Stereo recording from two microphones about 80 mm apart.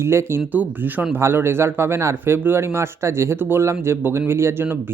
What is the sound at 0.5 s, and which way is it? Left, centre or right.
Speech, right.